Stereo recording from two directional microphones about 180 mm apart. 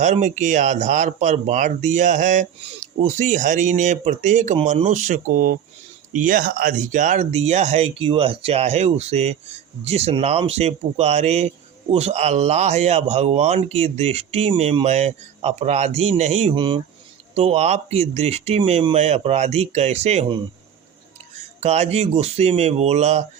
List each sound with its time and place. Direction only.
0.0 s a man's voice: 40° right (ahead or behind)
21.6 s a man's voice: 35° right (ahead or behind)